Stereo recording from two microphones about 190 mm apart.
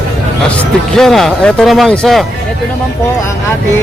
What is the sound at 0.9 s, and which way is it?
Speech, centre (ahead or behind).